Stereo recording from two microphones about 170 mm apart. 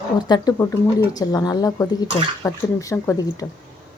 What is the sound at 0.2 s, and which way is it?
Speech, 25° left (ahead or behind).